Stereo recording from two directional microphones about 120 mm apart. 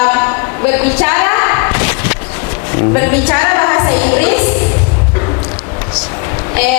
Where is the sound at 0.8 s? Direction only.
15° left (ahead or behind).